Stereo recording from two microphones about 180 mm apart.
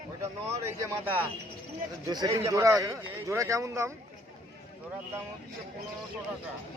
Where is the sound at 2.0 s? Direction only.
20° right (ahead or behind).